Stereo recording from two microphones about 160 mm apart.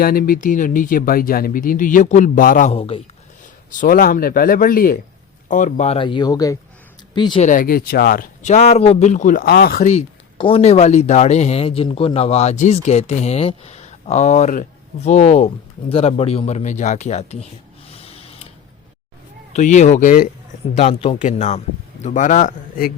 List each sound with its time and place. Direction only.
0.0 s speech: 65° left (ahead or behind)
2.7 s speech: 35° left (ahead or behind)
3.7 s speech: 55° left (ahead or behind)
5.5 s speech: 50° left (ahead or behind); by 7.4 s 30° left (ahead or behind)
7.4 s speech: 60° left (ahead or behind); by 9.8 s 75° left (ahead or behind)
10.3 s speech: 35° left (ahead or behind)
17.8 s a sound: 40° left (ahead or behind)
19.5 s speech: 50° left (ahead or behind)